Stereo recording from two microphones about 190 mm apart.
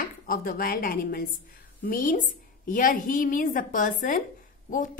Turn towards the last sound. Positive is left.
turn(degrees=45)  # may be behind; listen again after turning